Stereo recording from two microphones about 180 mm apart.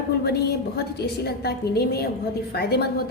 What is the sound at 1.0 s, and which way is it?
A woman's voice, 65° left (ahead or behind).